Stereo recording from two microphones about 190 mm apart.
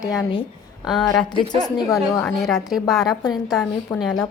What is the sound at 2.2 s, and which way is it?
Speech, 5° left (ahead or behind).